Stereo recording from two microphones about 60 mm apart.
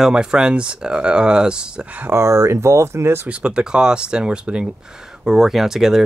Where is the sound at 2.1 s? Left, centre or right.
Right.